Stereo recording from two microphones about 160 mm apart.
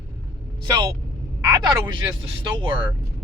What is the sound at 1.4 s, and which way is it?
Speech, 25° right (ahead or behind).